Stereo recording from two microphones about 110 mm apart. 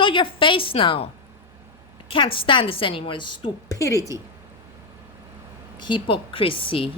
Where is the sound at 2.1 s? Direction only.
55° left (ahead or behind).